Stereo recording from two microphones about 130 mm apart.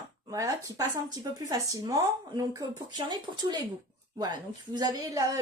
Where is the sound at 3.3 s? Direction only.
40° right (ahead or behind).